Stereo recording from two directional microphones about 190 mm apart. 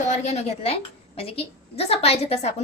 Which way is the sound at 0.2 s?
35° left (ahead or behind).